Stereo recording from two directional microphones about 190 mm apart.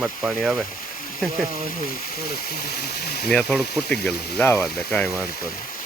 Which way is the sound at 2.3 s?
55° left (ahead or behind).